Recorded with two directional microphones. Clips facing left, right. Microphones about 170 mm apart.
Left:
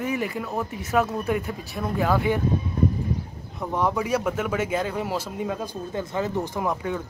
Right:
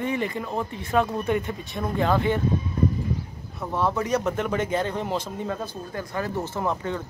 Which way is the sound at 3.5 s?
15° left (ahead or behind).